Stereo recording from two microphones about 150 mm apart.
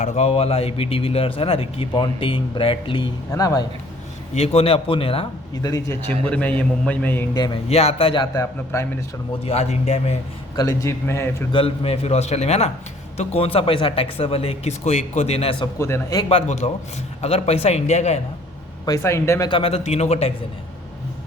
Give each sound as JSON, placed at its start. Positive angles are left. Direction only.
{"t": 0.0, "sound": "speech", "side_deg": 50}
{"t": 4.4, "sound": "speech", "side_deg": 40}
{"t": 5.6, "sound": "a man's voice", "side_deg": 25}
{"t": 6.1, "sound": "a man's voice", "side_deg": 10}
{"t": 7.3, "sound": "a man's voice", "side_deg": 25}
{"t": 7.7, "sound": "speech", "side_deg": 45}
{"t": 8.2, "sound": "a man's voice", "side_deg": 20}
{"t": 9.4, "sound": "a man's voice", "side_deg": 45}
{"t": 10.5, "sound": "a man's voice", "side_deg": 25}
{"t": 11.5, "sound": "a man's voice", "side_deg": 40}
{"t": 15.8, "sound": "a man's voice", "side_deg": 20}
{"t": 16.3, "sound": "a man's voice", "side_deg": 45}
{"t": 18.9, "sound": "a man's voice", "side_deg": 20}
{"t": 19.5, "sound": "a man's voice", "side_deg": 40}